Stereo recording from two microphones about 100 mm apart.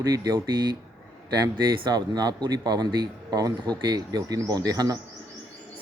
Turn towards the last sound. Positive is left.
turn(degrees=-40)  # may be behind; listen again after turning